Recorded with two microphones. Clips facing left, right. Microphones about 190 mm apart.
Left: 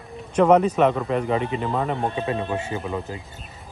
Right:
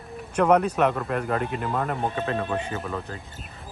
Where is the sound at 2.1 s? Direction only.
15° left (ahead or behind).